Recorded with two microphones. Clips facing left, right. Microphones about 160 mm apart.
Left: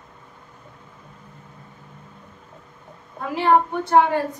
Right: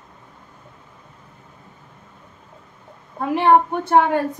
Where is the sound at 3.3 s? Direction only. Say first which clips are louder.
Right 3 dB; 60° right (ahead or behind).